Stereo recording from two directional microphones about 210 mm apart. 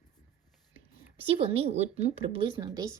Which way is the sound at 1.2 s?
25° right (ahead or behind).